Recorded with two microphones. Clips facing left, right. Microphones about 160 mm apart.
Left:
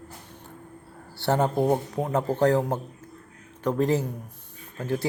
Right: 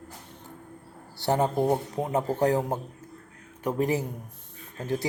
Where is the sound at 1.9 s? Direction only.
20° right (ahead or behind).